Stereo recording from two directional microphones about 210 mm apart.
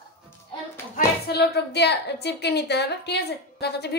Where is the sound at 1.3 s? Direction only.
50° left (ahead or behind).